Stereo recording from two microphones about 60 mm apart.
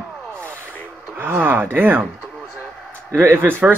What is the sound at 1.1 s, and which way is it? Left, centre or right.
Speech, right.